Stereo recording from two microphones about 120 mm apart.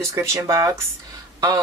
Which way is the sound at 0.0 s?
25° right (ahead or behind).